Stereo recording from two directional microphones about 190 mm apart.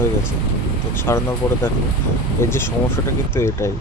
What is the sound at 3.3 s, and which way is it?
Speech, 15° left (ahead or behind).